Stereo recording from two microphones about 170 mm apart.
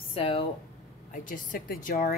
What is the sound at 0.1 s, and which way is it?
Speech, 35° left (ahead or behind).